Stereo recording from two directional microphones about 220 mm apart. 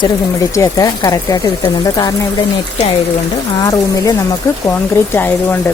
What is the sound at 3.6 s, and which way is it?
Speech, 15° left (ahead or behind).